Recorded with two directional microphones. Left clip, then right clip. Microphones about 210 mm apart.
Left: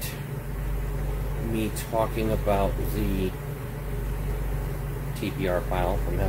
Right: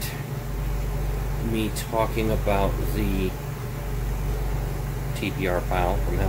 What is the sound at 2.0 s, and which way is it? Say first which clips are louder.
Speech: right 1 dB; 15° right (ahead or behind).